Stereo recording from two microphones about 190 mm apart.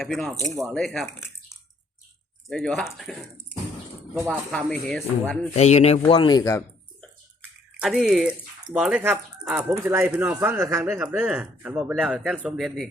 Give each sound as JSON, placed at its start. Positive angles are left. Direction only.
{"t": 0.0, "sound": "speech", "side_deg": 0}
{"t": 2.5, "sound": "speech", "side_deg": 0}
{"t": 4.3, "sound": "speech", "side_deg": 5}
{"t": 5.5, "sound": "a man's voice", "side_deg": 35}
{"t": 6.1, "sound": "speech", "side_deg": 25}
{"t": 7.8, "sound": "speech", "side_deg": 0}